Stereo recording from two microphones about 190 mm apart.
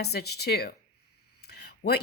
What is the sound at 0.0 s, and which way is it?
Speech, 60° left (ahead or behind).